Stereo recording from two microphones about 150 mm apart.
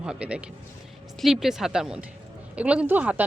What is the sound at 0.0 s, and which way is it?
A woman's voice, 5° right (ahead or behind).